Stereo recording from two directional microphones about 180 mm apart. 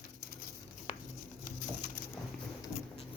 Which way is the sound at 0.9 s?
40° left (ahead or behind).